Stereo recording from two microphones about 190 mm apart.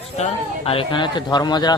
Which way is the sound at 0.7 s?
25° left (ahead or behind).